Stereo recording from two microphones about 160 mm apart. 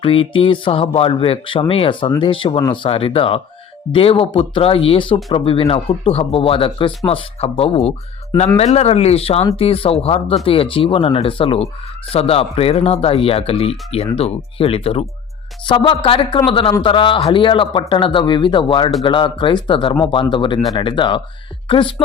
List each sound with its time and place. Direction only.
0.0 s speech: 35° left (ahead or behind)